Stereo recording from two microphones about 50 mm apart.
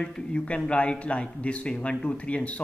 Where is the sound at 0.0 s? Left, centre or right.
Centre.